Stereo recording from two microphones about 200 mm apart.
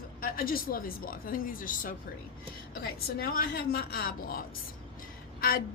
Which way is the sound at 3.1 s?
45° left (ahead or behind).